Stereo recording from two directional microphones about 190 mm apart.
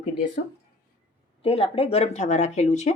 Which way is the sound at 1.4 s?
30° left (ahead or behind).